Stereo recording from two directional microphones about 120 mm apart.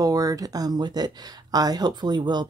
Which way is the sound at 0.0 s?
30° right (ahead or behind).